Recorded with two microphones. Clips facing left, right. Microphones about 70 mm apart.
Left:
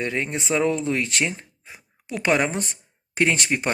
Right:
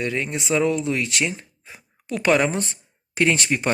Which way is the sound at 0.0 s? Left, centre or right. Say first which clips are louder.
Right 1 dB; left.